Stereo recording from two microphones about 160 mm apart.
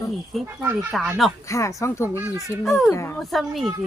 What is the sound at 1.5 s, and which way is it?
Speech, 20° left (ahead or behind).